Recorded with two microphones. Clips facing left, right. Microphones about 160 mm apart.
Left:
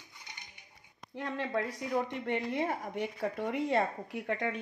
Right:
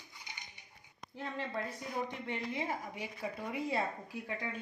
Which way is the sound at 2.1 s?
65° left (ahead or behind).